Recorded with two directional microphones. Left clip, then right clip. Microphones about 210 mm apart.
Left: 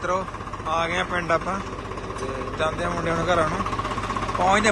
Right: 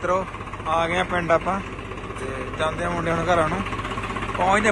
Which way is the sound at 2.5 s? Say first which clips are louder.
Right 1 dB; 15° left (ahead or behind).